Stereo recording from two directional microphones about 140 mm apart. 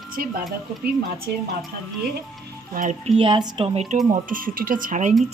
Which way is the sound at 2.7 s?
70° right (ahead or behind).